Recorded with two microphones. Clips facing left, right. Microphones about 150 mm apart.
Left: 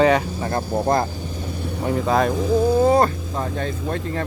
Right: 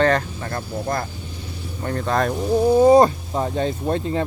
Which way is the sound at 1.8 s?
5° left (ahead or behind).